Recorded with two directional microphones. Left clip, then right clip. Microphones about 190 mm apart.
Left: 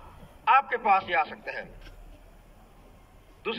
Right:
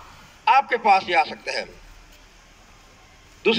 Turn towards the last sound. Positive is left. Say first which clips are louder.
# right 13 dB
turn(degrees=-30)  # may be behind; listen again after turning